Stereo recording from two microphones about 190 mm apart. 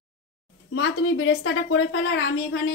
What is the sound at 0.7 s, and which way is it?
A woman's voice, 90° left.